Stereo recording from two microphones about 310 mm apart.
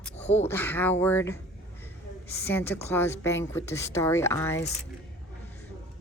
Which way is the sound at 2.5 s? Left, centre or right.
Centre.